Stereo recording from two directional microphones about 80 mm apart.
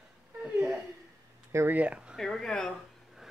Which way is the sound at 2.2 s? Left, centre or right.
Centre.